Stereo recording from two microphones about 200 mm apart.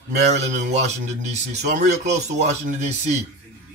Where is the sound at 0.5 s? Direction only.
35° right (ahead or behind).